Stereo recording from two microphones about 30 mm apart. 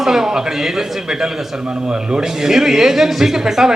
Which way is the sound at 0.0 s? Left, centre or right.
Centre.